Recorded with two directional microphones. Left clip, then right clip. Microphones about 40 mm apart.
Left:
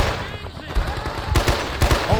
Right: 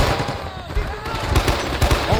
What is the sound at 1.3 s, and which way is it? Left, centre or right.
Fusillade, centre.